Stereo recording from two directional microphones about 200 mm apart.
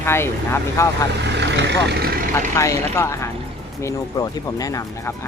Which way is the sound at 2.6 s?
15° left (ahead or behind).